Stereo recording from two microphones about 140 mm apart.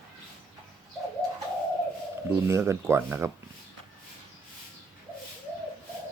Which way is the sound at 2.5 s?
20° right (ahead or behind).